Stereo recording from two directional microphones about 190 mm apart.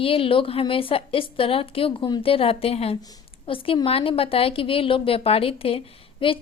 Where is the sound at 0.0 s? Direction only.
30° left (ahead or behind).